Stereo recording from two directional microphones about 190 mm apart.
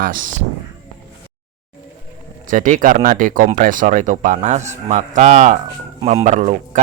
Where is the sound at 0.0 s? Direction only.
45° right (ahead or behind).